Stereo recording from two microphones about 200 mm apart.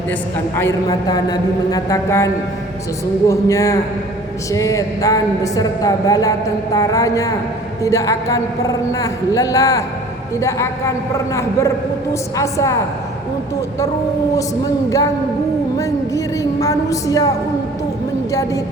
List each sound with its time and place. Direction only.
0.5 s a woman's voice: 15° left (ahead or behind)
14.8 s a woman's voice: 15° left (ahead or behind)